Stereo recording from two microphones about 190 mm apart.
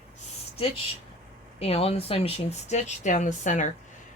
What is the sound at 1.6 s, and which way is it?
A woman's voice, 30° left (ahead or behind).